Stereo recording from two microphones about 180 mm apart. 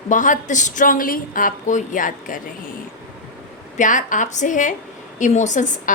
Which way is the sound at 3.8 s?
45° left (ahead or behind).